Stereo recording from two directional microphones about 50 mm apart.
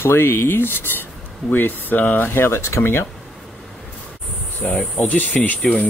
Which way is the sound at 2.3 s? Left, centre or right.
Left.